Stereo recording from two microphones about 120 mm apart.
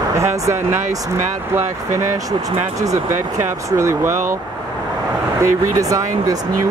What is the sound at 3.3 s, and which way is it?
Speech, 25° right (ahead or behind).